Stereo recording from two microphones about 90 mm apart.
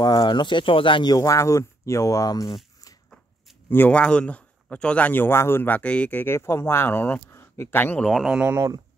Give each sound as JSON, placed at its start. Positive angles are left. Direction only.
{"t": 0.0, "sound": "speech", "side_deg": 55}
{"t": 1.0, "sound": "speech", "side_deg": 40}
{"t": 3.7, "sound": "a man's voice", "side_deg": 20}
{"t": 8.0, "sound": "speech", "side_deg": 0}
{"t": 8.5, "sound": "speech", "side_deg": -35}